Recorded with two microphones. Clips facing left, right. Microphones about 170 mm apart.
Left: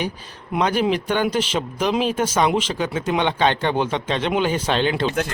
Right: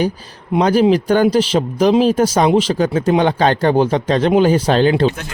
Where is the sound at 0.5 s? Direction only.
35° right (ahead or behind).